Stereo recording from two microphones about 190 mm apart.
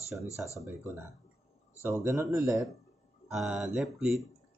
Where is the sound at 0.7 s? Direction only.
15° right (ahead or behind).